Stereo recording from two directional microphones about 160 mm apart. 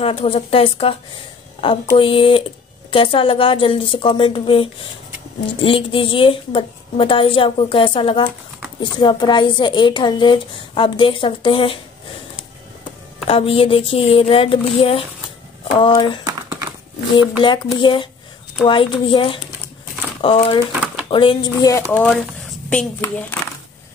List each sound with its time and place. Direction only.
0.0 s a woman's voice: 35° left (ahead or behind)
13.3 s a woman's voice: 35° left (ahead or behind)
17.4 s a woman's voice: 30° left (ahead or behind)
21.9 s a woman's voice: 5° left (ahead or behind)